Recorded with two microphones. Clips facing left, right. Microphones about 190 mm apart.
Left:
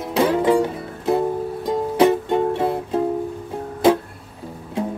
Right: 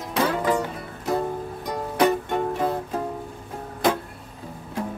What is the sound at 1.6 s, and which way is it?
Music, 25° left (ahead or behind).